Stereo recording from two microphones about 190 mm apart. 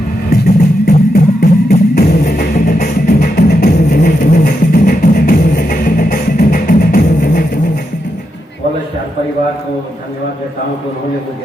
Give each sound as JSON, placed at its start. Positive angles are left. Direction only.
{"t": 0.3, "sound": "music", "side_deg": 55}